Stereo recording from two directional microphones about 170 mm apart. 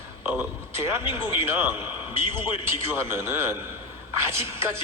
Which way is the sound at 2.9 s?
15° right (ahead or behind).